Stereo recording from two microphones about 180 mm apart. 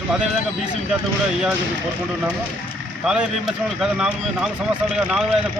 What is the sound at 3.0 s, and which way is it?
A man's voice, 5° right (ahead or behind).